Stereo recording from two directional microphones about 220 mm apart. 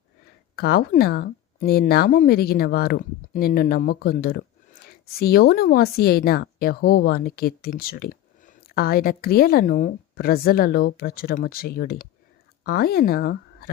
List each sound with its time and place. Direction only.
0.5 s a woman's voice: 45° left (ahead or behind)